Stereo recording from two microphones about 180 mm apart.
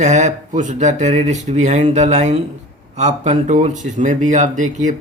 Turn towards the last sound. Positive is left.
turn(degrees=-45)  # may be behind; listen again after turning